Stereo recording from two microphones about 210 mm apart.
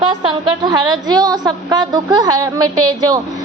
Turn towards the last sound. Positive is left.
turn(degrees=-15)  # may be behind; listen again after turning